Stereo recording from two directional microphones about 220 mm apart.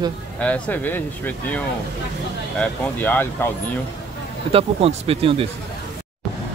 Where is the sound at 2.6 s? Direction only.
10° left (ahead or behind).